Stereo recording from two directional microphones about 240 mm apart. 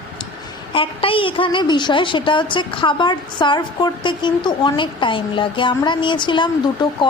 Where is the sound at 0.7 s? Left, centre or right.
Left.